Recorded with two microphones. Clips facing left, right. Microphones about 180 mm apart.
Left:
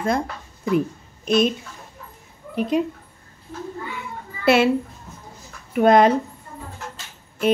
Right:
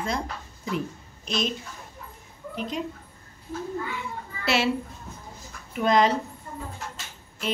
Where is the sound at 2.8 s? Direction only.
65° left (ahead or behind).